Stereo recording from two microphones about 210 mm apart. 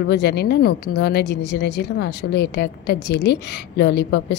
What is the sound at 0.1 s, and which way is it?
A woman's voice, 55° left (ahead or behind).